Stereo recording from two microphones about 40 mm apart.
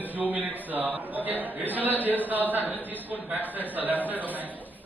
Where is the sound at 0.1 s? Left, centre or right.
Right.